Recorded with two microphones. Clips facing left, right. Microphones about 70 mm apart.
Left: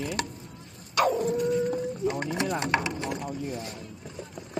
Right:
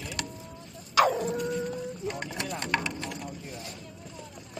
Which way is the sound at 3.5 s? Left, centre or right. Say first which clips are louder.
Left 6 dB; left.